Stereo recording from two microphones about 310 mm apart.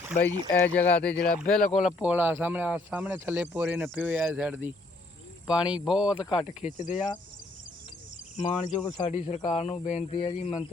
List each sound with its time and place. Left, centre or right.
0.6 s speech: centre
6.7 s speech: left
8.4 s speech: left